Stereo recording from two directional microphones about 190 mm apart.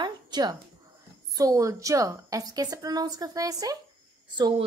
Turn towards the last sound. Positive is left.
turn(degrees=-25)  # may be behind; listen again after turning